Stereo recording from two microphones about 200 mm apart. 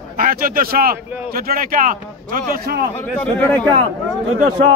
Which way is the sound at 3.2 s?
10° left (ahead or behind).